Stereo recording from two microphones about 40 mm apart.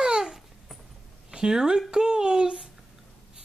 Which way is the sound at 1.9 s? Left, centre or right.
Centre.